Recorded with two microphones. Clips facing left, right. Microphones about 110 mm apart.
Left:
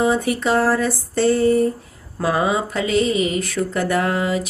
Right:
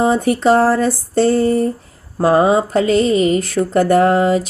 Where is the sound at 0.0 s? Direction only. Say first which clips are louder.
Right 5 dB; 45° right (ahead or behind).